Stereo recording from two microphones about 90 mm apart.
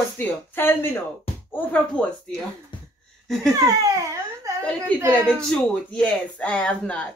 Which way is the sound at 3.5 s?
40° right (ahead or behind).